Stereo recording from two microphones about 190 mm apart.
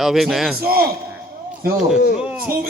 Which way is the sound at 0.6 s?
50° right (ahead or behind).